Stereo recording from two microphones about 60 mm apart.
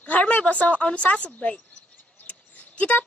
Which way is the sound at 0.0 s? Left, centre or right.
Left.